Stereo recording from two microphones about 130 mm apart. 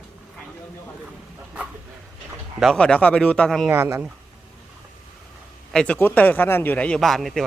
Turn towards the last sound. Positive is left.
turn(degrees=0)  # may be behind; listen again after turning